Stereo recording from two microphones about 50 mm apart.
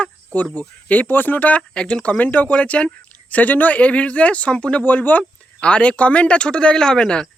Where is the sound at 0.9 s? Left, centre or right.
Left.